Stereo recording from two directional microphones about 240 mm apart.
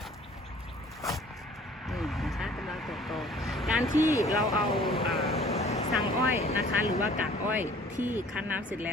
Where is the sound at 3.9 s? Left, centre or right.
Centre.